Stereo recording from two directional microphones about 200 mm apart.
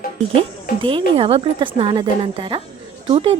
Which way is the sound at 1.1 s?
30° right (ahead or behind).